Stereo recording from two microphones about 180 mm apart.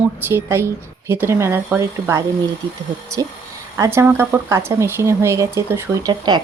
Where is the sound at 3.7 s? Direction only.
15° right (ahead or behind).